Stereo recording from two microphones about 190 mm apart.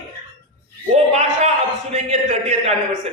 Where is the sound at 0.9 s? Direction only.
35° right (ahead or behind).